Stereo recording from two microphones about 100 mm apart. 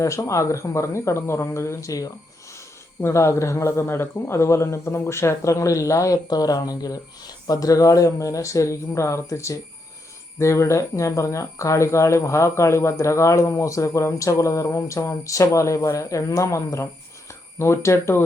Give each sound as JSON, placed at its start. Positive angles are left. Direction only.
{"t": 0.0, "sound": "speech", "side_deg": 30}